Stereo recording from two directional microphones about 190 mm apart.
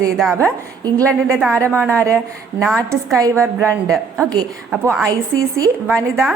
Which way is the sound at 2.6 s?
5° left (ahead or behind).